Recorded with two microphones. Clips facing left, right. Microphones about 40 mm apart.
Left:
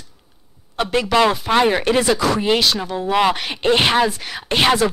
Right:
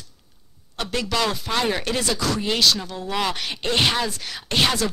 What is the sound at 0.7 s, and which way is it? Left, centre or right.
Speech, centre.